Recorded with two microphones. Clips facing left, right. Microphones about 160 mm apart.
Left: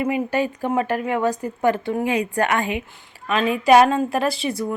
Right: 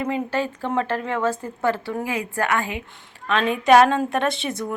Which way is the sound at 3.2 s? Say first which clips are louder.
Left 1 dB; 5° left (ahead or behind).